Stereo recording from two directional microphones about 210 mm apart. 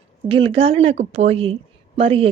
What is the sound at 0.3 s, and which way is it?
Speech, 25° right (ahead or behind).